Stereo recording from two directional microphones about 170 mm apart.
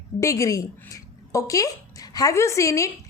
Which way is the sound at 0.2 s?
20° left (ahead or behind).